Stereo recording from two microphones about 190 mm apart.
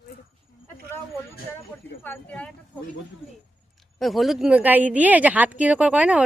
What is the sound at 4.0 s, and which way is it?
A woman's voice, centre (ahead or behind).